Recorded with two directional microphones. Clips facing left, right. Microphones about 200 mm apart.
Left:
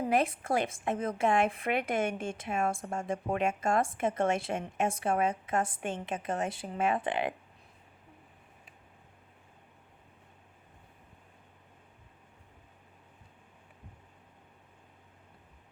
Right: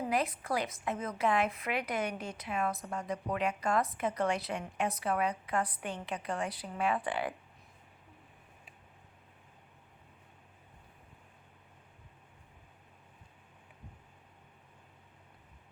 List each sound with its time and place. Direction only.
0.1 s a woman's voice: 25° left (ahead or behind)